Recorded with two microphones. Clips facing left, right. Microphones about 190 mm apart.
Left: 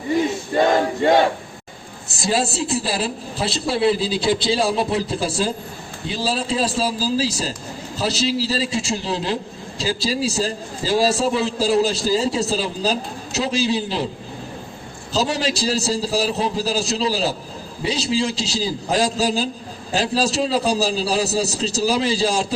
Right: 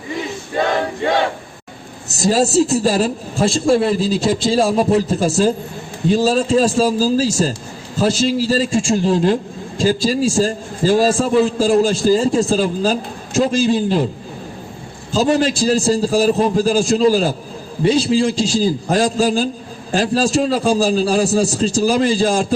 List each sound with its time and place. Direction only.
2.0 s a man's voice: 40° right (ahead or behind)
15.1 s a man's voice: 50° right (ahead or behind)